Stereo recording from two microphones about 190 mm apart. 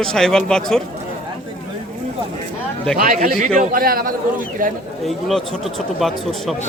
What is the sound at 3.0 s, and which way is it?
A man's voice, 50° right (ahead or behind).